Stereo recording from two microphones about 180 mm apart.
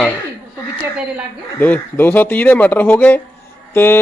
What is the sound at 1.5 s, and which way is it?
Speech, 10° left (ahead or behind).